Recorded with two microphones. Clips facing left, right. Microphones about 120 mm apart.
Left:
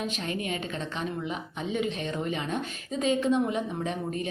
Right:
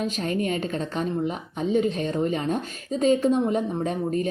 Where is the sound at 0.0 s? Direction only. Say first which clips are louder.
Right 6 dB; 40° right (ahead or behind).